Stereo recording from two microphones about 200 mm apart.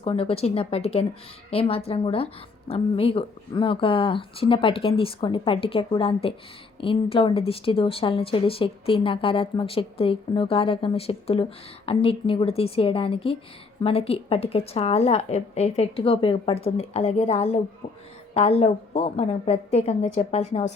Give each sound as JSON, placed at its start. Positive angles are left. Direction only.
{"t": 0.0, "sound": "a woman's voice", "side_deg": 30}